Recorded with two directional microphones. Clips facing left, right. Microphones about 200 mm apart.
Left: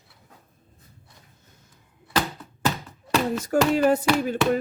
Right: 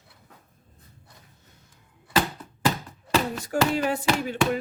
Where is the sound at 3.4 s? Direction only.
40° left (ahead or behind).